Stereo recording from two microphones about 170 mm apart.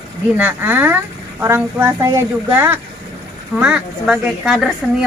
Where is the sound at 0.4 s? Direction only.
10° right (ahead or behind).